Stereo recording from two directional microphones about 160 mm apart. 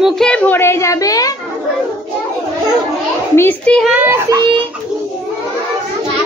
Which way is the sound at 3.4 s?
10° left (ahead or behind).